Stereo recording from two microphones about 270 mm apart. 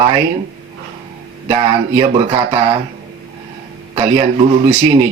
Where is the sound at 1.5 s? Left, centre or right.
Centre.